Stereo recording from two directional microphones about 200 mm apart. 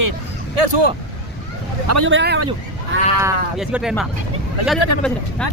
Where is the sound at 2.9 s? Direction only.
70° right (ahead or behind).